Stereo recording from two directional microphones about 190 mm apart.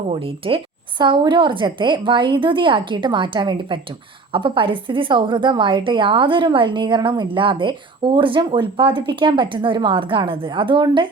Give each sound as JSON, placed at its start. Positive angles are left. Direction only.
{"t": 0.1, "sound": "a woman's voice", "side_deg": -30}